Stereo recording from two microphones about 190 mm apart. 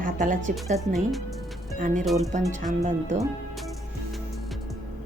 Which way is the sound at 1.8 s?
40° right (ahead or behind).